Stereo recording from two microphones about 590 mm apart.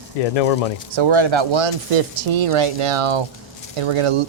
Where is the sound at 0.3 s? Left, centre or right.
Left.